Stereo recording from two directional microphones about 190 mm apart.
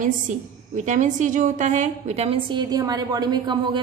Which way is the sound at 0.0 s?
40° right (ahead or behind).